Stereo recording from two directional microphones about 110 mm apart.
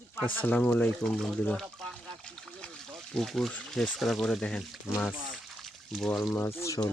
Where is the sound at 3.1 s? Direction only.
5° left (ahead or behind).